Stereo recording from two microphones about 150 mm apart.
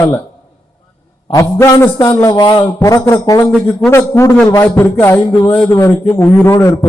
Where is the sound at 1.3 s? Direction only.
20° left (ahead or behind).